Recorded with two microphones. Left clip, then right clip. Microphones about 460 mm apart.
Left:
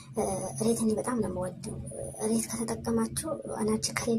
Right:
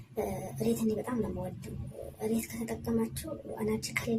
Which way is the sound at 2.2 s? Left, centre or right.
Right.